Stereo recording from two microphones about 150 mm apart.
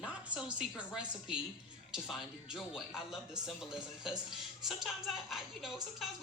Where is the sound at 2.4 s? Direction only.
5° right (ahead or behind).